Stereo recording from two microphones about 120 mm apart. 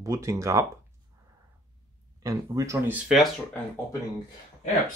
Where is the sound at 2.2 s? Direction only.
30° right (ahead or behind).